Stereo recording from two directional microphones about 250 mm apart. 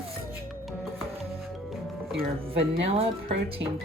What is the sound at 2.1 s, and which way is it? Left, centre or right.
Speech, right.